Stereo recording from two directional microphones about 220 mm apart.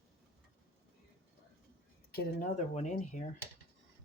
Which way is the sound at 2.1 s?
35° left (ahead or behind).